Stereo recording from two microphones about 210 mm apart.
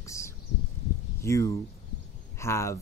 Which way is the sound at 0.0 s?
15° left (ahead or behind).